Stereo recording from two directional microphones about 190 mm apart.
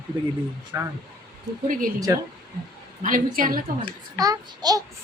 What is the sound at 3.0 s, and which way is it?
Speech, 45° right (ahead or behind).